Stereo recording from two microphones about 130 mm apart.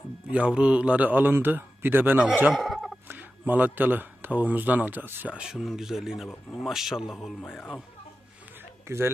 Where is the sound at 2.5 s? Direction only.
Centre (ahead or behind).